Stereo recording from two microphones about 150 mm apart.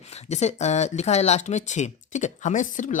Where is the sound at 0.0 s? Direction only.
45° left (ahead or behind).